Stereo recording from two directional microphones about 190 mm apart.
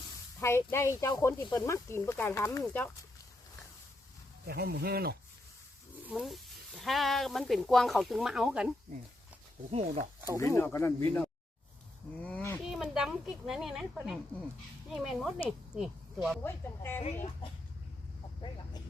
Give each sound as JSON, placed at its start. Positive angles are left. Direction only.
{"t": 0.3, "sound": "speech", "side_deg": 15}
{"t": 4.4, "sound": "speech", "side_deg": -55}
{"t": 6.1, "sound": "speech", "side_deg": 0}
{"t": 9.7, "sound": "speech", "side_deg": -35}
{"t": 10.3, "sound": "speech", "side_deg": 15}
{"t": 12.6, "sound": "speech", "side_deg": 0}
{"t": 16.4, "sound": "speech", "side_deg": 10}
{"t": 18.3, "sound": "a sound", "side_deg": 25}